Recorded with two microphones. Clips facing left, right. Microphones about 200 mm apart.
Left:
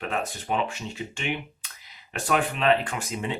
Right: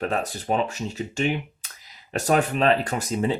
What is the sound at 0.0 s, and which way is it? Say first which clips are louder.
Speech: right 4 dB; 40° right (ahead or behind).